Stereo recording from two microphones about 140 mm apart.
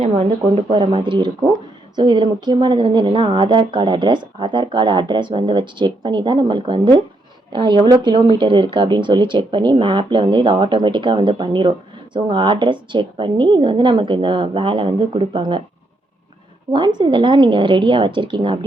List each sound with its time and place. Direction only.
0.0 s speech: 45° right (ahead or behind)
16.7 s speech: 35° right (ahead or behind)